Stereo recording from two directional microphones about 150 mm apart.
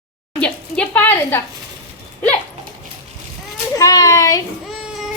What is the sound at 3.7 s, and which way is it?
Speech, 25° left (ahead or behind).